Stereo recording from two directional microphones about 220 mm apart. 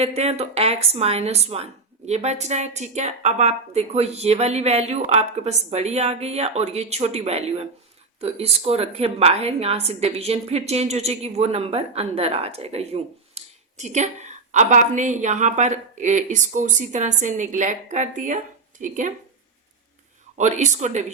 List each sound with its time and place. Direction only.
0.0 s a woman's voice: 30° right (ahead or behind)
20.3 s speech: 30° right (ahead or behind)